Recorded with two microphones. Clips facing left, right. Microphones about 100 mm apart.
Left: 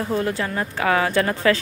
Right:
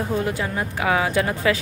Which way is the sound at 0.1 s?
15° right (ahead or behind).